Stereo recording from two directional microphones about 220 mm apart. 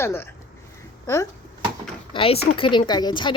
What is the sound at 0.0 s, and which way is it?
A woman's voice, 10° left (ahead or behind).